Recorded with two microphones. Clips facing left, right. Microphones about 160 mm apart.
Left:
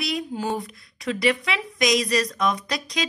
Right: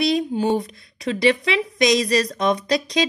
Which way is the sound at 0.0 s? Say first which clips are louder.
Right 7 dB; 25° right (ahead or behind).